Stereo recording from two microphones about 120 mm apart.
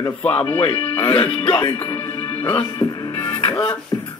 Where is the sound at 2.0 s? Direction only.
15° left (ahead or behind).